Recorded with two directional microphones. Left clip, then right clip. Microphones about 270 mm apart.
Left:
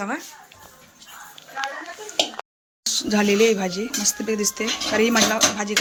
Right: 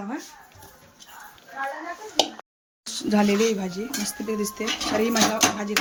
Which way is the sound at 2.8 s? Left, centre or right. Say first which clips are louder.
Left 3 dB; centre.